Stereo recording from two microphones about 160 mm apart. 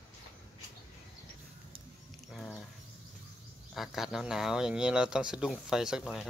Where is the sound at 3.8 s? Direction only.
Centre (ahead or behind).